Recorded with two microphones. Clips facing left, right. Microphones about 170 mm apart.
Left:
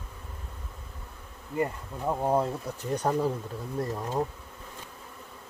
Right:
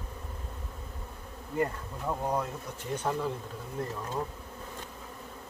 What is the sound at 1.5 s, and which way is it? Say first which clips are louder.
Bee: left 1 dB; 20° left (ahead or behind).